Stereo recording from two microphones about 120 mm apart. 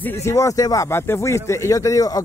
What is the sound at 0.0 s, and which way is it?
Speech, 25° left (ahead or behind).